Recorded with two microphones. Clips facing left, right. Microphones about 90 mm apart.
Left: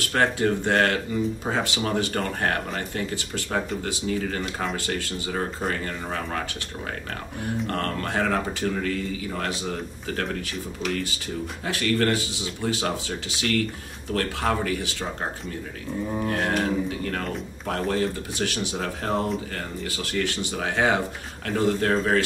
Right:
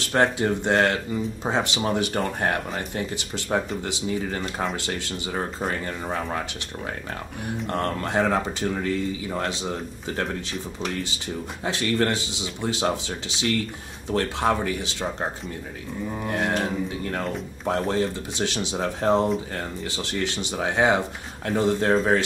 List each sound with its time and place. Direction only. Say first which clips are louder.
0.0 s speech: right 1 dB; 25° right (ahead or behind)
7.6 s speech: right 4 dB; 20° right (ahead or behind)
16.3 s speech: right 1 dB; 20° right (ahead or behind)